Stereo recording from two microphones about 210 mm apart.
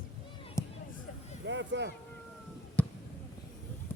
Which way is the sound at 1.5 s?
60° right (ahead or behind).